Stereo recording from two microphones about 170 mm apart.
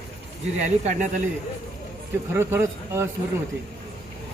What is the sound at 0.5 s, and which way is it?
Speech, 45° right (ahead or behind).